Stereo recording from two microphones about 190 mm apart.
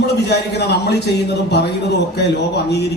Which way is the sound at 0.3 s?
60° left (ahead or behind).